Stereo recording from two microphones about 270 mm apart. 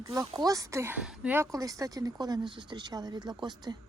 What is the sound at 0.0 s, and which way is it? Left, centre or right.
Speech, centre.